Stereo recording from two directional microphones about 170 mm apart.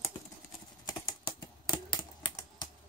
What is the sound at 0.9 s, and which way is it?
Typing, 25° left (ahead or behind).